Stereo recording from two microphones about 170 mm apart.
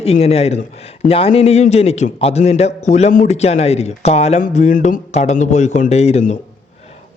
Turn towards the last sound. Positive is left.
turn(degrees=40)  # may be behind; listen again after turning